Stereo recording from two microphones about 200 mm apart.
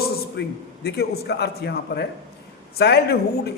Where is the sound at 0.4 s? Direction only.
55° left (ahead or behind).